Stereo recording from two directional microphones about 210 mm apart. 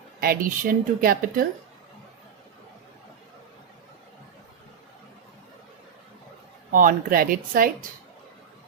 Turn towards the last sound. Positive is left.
turn(degrees=-45)  # may be behind; listen again after turning